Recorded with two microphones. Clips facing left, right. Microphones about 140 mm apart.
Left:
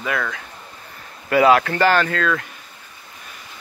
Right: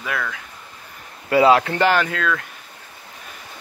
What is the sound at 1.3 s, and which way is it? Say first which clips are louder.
Speech: even; 25° right (ahead or behind).